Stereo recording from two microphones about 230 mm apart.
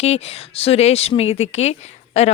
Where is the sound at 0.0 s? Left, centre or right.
Left.